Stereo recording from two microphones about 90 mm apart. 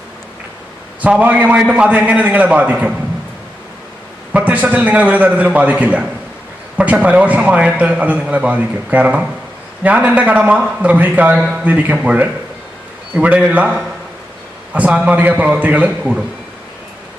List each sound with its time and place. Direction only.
1.0 s a man's voice: 15° right (ahead or behind)
4.3 s a man's voice: 15° right (ahead or behind)